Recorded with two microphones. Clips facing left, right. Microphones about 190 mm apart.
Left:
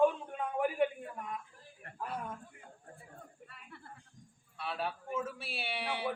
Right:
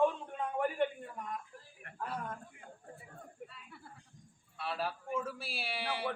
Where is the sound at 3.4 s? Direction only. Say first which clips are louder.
Right 7 dB; 55° right (ahead or behind).